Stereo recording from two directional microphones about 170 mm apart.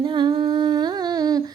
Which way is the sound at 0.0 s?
25° right (ahead or behind).